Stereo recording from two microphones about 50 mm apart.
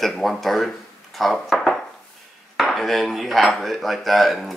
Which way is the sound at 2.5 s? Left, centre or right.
Centre.